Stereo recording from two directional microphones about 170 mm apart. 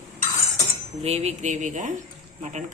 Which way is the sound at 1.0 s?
40° right (ahead or behind).